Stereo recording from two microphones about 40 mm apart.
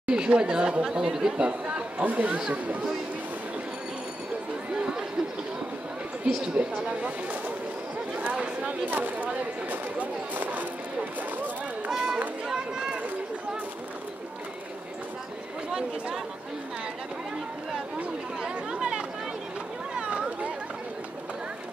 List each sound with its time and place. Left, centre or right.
0.0 s speech: right
1.4 s speech: right
6.2 s speech: right
8.8 s speech: right
11.9 s speech: centre
18.4 s speech: right
20.0 s chatter: right